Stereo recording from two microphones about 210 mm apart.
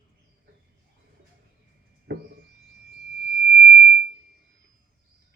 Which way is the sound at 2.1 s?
55° right (ahead or behind).